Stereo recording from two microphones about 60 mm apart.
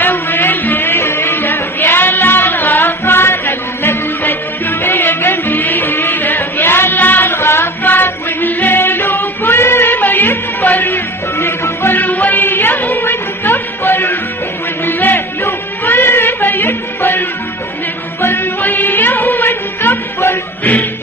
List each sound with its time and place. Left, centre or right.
0.0 s music: left
12.0 s music: left